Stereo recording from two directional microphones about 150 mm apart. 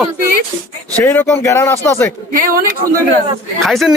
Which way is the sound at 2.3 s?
70° right (ahead or behind).